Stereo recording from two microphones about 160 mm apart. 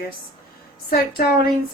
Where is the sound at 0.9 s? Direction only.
70° left (ahead or behind).